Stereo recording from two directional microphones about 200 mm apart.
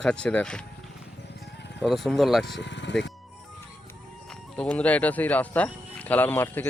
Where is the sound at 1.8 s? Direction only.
Centre (ahead or behind).